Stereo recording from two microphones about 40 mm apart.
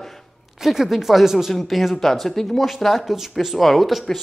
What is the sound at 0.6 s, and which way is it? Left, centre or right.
Speech, centre.